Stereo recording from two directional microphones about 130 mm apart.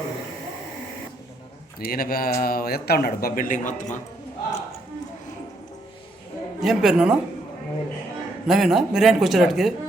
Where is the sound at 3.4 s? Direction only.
90° left.